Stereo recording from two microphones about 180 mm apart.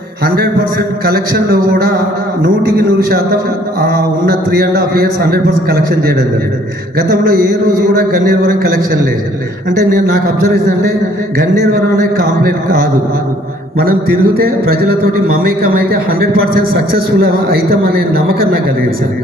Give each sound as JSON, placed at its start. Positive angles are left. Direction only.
{"t": 0.3, "sound": "a man's voice", "side_deg": -60}
{"t": 4.3, "sound": "a man's voice", "side_deg": -60}
{"t": 10.4, "sound": "a man's voice", "side_deg": -60}
{"t": 14.3, "sound": "a man's voice", "side_deg": -55}